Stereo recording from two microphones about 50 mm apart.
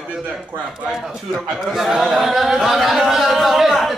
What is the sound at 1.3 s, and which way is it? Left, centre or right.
A man's voice, centre.